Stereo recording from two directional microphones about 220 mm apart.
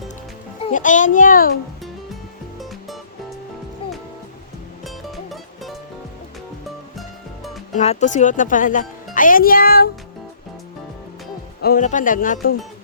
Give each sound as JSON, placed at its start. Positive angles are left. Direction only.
{"t": 0.6, "sound": "speech", "side_deg": 35}
{"t": 2.6, "sound": "music", "side_deg": 0}
{"t": 4.9, "sound": "music", "side_deg": 0}
{"t": 7.8, "sound": "speech", "side_deg": 30}
{"t": 11.6, "sound": "speech", "side_deg": 40}